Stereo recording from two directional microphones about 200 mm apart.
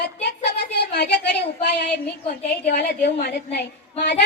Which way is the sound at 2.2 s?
45° left (ahead or behind).